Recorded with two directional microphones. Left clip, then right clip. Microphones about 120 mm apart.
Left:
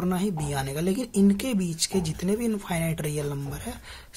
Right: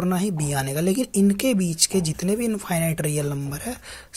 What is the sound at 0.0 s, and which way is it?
Speech, 45° right (ahead or behind).